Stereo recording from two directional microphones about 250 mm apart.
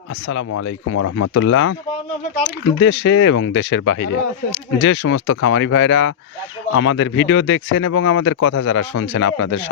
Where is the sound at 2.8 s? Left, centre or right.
Left.